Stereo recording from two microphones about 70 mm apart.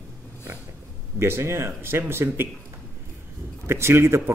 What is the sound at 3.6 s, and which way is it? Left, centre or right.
Speech, right.